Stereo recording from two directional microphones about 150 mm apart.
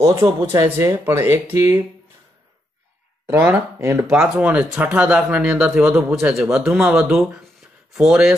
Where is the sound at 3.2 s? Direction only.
15° right (ahead or behind).